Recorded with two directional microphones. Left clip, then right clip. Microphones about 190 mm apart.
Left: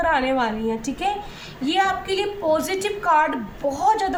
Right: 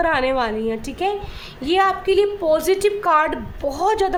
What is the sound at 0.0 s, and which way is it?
A woman's voice, 55° right (ahead or behind).